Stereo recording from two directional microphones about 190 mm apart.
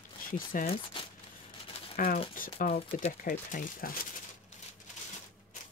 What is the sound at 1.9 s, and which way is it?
Speech, 50° left (ahead or behind).